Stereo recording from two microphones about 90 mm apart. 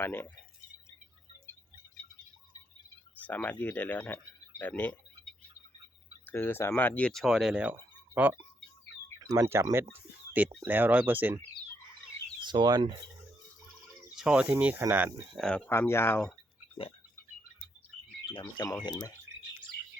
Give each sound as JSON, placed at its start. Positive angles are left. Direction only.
{"t": 0.0, "sound": "speech", "side_deg": 20}
{"t": 3.2, "sound": "speech", "side_deg": 15}
{"t": 6.2, "sound": "speech", "side_deg": 25}
{"t": 7.1, "sound": "speech", "side_deg": 0}
{"t": 9.2, "sound": "speech", "side_deg": -40}
{"t": 9.7, "sound": "speech", "side_deg": -20}
{"t": 12.4, "sound": "speech", "side_deg": -55}
{"t": 14.2, "sound": "speech", "side_deg": -10}
{"t": 15.4, "sound": "speech", "side_deg": 10}
{"t": 15.7, "sound": "speech", "side_deg": 30}
{"t": 18.3, "sound": "speech", "side_deg": 50}